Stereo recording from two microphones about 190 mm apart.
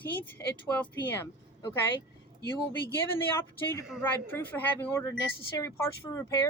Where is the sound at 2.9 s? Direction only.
15° left (ahead or behind).